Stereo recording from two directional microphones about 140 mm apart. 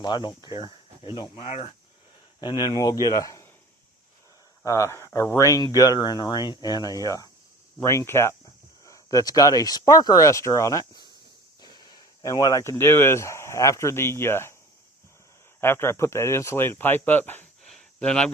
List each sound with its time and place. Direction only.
0.0 s speech: 30° left (ahead or behind)
1.5 s speech: 55° left (ahead or behind)
2.4 s speech: 30° left (ahead or behind)
4.6 s speech: 20° left (ahead or behind)
15.6 s speech: 15° left (ahead or behind)
17.6 s a sound: 5° left (ahead or behind)